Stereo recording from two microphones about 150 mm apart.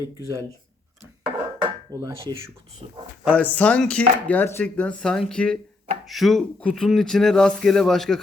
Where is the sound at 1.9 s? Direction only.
25° right (ahead or behind).